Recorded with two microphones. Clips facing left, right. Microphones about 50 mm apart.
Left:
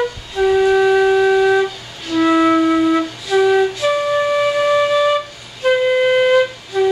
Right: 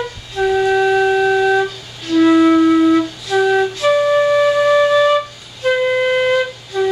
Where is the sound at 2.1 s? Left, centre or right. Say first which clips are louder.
Right 3 dB; centre.